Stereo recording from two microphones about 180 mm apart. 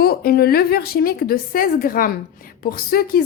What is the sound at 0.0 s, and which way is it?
A woman's voice, 55° left (ahead or behind).